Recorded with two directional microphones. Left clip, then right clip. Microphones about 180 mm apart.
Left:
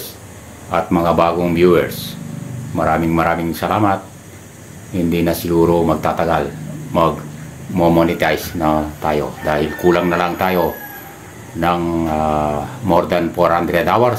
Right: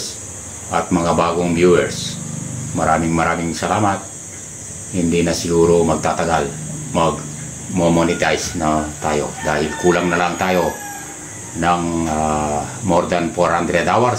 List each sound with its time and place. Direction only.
0.7 s speech: 15° left (ahead or behind)
5.1 s speech: 15° left (ahead or behind)
11.6 s speech: 15° left (ahead or behind)